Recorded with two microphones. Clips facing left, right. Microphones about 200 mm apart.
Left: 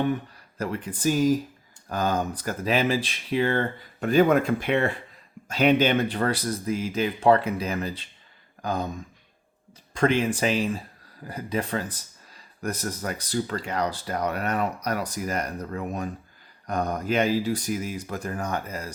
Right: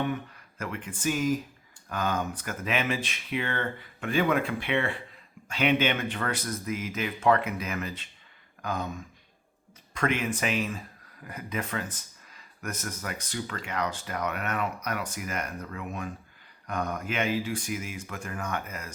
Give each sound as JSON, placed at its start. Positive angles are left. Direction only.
{"t": 0.0, "sound": "speech", "side_deg": 35}
{"t": 9.9, "sound": "speech", "side_deg": 30}